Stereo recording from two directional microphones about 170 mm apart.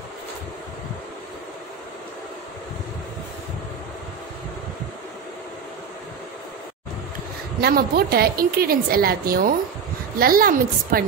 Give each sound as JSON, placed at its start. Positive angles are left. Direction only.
{"t": 7.6, "sound": "a woman's voice", "side_deg": -65}